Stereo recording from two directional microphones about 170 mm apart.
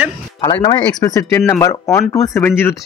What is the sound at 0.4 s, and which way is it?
Speech, 25° left (ahead or behind).